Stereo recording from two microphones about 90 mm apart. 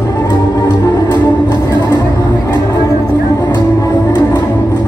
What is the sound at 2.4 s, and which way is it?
Music, 35° left (ahead or behind).